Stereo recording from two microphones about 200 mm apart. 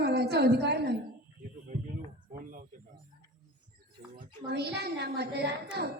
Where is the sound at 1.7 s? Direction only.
40° right (ahead or behind).